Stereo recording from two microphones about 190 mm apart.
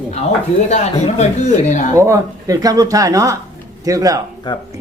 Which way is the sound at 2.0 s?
15° right (ahead or behind).